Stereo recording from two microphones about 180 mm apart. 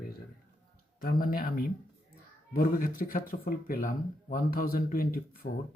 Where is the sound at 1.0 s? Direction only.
55° left (ahead or behind).